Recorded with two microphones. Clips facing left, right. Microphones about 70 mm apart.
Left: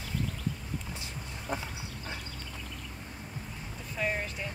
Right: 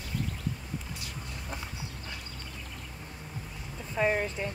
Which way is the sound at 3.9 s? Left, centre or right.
Right.